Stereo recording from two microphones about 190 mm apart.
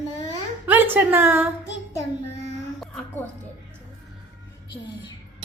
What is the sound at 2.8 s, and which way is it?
Music, 5° left (ahead or behind).